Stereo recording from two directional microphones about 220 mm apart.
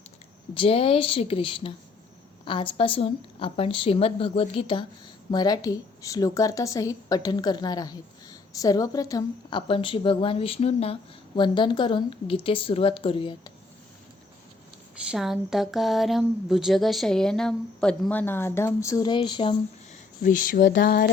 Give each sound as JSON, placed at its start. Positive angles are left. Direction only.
{"t": 0.5, "sound": "a woman's voice", "side_deg": 25}
{"t": 15.1, "sound": "speech", "side_deg": 0}
{"t": 20.2, "sound": "speech", "side_deg": 35}